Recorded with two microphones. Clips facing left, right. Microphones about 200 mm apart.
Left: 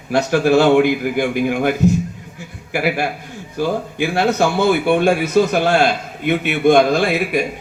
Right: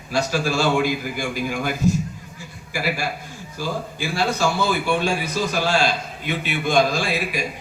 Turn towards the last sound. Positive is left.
turn(degrees=60)  # may be behind; listen again after turning